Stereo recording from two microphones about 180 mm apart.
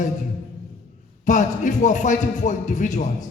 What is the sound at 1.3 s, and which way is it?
A man's voice, 45° left (ahead or behind).